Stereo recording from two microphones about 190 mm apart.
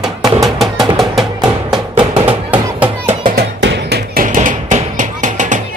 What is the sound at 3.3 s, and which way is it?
Music, 65° right (ahead or behind).